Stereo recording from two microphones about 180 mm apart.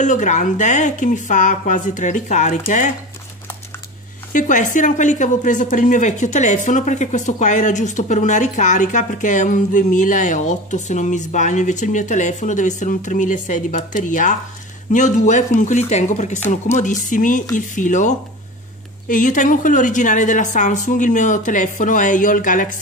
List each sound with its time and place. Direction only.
0.0 s speech: 45° left (ahead or behind)
4.3 s speech: 45° left (ahead or behind)